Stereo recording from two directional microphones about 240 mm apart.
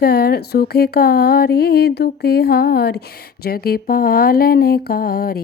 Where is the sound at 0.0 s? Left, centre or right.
Left.